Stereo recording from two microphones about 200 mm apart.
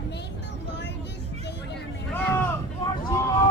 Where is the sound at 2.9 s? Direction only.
15° left (ahead or behind).